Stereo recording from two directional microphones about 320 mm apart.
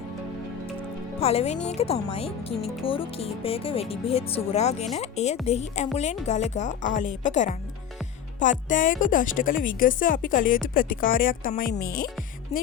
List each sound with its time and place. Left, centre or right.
1.2 s speech: centre